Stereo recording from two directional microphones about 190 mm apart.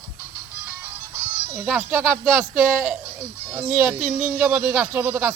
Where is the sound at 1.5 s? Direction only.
10° right (ahead or behind).